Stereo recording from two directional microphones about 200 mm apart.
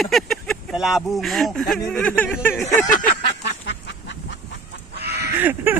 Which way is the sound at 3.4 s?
60° left (ahead or behind).